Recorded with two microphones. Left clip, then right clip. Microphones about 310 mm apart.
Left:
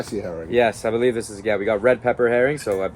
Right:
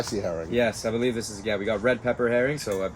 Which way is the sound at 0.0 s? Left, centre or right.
Centre.